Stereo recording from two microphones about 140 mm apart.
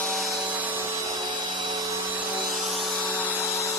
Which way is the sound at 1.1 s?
30° right (ahead or behind).